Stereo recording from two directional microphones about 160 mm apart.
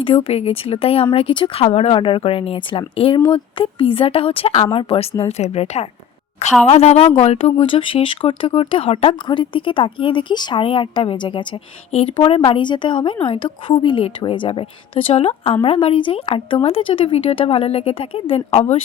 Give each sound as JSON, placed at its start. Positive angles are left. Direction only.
{"t": 0.0, "sound": "speech", "side_deg": 35}